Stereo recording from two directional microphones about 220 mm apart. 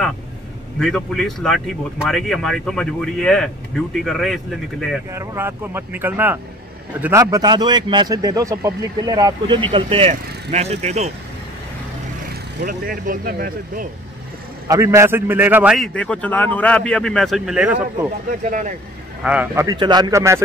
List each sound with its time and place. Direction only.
0.7 s speech: centre (ahead or behind)
5.1 s speech: 10° right (ahead or behind); by 11.1 s 30° right (ahead or behind)
12.6 s speech: 40° right (ahead or behind)
14.7 s speech: 15° right (ahead or behind)
18.4 s speech: 35° right (ahead or behind)
19.2 s speech: 10° right (ahead or behind)